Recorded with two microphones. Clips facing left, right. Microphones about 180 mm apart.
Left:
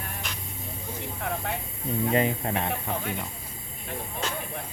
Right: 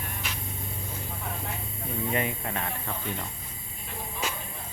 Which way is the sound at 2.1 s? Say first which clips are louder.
Left 6 dB; 30° left (ahead or behind).